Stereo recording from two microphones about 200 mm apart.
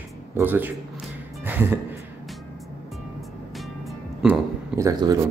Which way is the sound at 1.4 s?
10° right (ahead or behind).